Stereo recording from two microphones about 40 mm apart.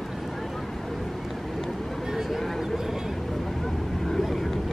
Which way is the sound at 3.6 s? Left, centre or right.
Centre.